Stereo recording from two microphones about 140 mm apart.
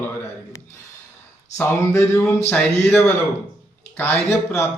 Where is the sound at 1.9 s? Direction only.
20° left (ahead or behind).